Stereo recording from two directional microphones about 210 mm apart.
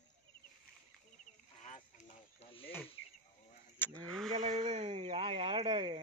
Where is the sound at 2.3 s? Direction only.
25° left (ahead or behind).